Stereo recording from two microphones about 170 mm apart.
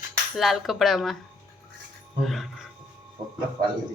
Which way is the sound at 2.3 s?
Centre (ahead or behind).